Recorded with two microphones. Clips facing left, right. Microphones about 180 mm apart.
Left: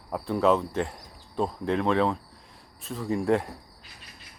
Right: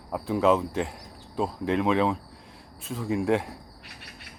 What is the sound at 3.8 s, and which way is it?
Cricket, 70° right (ahead or behind).